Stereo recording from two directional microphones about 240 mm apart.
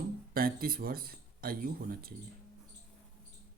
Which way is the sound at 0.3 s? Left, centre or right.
Right.